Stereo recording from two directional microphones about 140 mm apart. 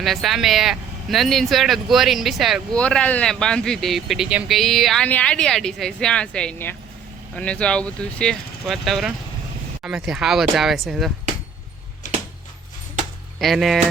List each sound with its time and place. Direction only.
0.0 s speech: centre (ahead or behind)
12.0 s a sound: 65° left (ahead or behind)
13.4 s speech: centre (ahead or behind)